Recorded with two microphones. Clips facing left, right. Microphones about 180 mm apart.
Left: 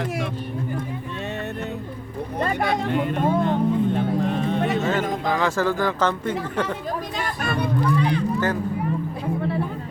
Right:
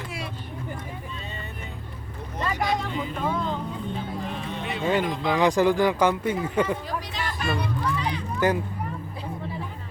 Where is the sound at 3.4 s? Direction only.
65° left (ahead or behind).